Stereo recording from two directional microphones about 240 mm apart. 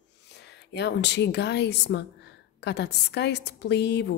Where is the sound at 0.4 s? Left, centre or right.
Left.